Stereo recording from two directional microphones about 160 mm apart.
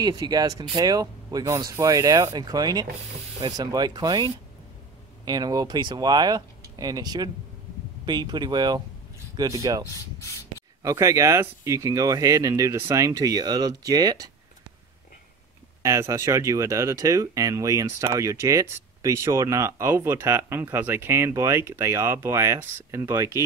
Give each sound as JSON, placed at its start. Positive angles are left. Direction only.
{"t": 0.0, "sound": "speech", "side_deg": -25}
{"t": 15.8, "sound": "speech", "side_deg": -20}